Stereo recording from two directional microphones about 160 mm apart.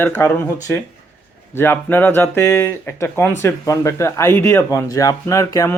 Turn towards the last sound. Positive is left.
turn(degrees=20)  # may be behind; listen again after turning